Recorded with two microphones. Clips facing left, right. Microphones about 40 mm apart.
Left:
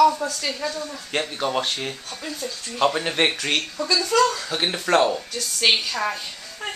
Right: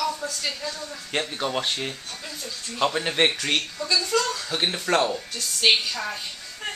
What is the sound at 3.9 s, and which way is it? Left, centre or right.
Speech, left.